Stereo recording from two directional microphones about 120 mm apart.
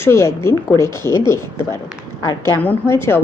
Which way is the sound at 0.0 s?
20° left (ahead or behind).